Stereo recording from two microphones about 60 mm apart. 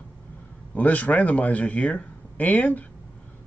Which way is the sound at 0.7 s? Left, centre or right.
Left.